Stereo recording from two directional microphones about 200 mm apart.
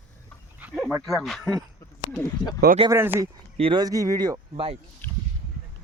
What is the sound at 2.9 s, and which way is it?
Speech, 15° right (ahead or behind).